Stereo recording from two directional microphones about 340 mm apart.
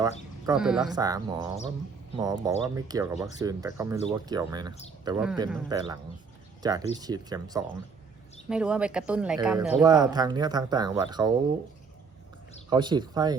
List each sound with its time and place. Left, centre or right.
0.4 s speech: centre
12.7 s speech: centre